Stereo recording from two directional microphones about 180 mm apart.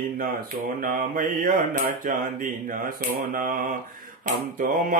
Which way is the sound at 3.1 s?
50° right (ahead or behind).